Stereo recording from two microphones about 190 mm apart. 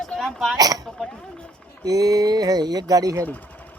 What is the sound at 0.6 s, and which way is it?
Speech, 20° right (ahead or behind).